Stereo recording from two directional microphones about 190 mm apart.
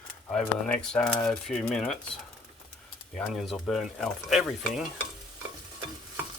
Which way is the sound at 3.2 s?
Centre (ahead or behind).